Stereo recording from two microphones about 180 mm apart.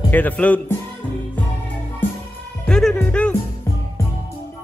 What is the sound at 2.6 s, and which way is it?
Speech, 5° left (ahead or behind).